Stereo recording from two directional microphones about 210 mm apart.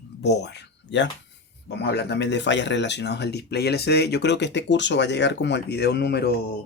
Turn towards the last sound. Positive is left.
turn(degrees=50)  # may be behind; listen again after turning